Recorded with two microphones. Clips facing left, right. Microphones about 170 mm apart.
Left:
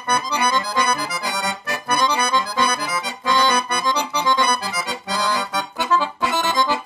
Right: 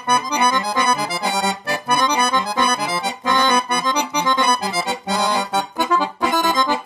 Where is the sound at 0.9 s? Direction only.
25° right (ahead or behind).